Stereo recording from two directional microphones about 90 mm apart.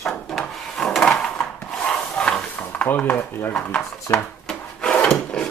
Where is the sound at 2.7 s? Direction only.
15° left (ahead or behind).